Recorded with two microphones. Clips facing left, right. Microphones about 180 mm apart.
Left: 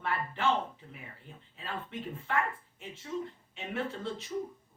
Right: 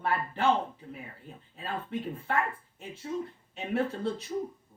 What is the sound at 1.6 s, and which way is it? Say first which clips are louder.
Speech: right 5 dB; 40° right (ahead or behind).